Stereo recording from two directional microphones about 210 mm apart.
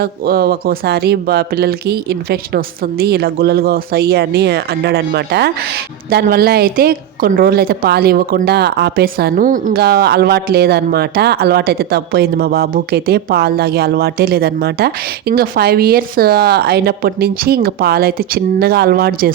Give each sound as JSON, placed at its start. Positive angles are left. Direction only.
{"t": 0.0, "sound": "a woman's voice", "side_deg": -45}